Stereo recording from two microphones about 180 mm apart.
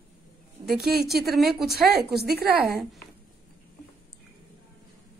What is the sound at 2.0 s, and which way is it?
Speech, 60° right (ahead or behind).